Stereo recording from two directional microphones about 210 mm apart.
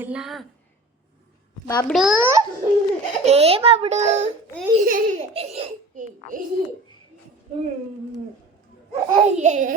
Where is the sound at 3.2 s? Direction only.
30° right (ahead or behind).